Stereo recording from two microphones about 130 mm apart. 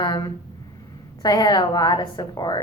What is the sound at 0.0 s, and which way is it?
A woman's voice, 30° left (ahead or behind).